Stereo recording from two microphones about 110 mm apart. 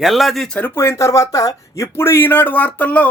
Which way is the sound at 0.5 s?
20° left (ahead or behind).